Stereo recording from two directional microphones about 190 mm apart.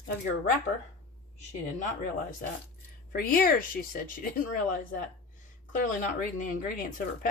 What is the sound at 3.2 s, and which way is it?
Speech, 50° left (ahead or behind).